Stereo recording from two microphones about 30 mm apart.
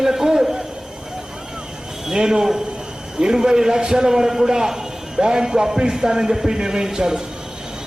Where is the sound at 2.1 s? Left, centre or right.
Right.